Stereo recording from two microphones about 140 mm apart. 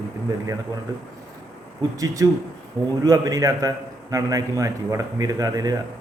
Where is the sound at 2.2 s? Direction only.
25° right (ahead or behind).